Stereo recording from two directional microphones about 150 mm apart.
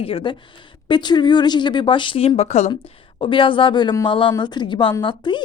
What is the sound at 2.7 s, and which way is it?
A woman's voice, 35° left (ahead or behind).